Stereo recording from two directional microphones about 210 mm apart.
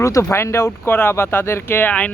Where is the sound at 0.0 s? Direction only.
15° left (ahead or behind).